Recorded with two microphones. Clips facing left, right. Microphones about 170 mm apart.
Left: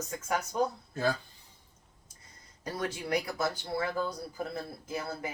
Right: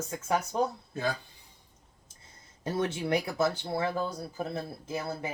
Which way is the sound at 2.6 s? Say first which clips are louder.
Right 5 dB; 25° right (ahead or behind).